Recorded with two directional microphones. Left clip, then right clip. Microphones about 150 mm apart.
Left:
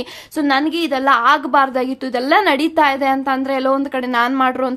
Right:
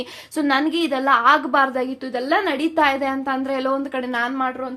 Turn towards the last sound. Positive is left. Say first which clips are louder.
# left 7 dB
turn(degrees=50)  # may be behind; listen again after turning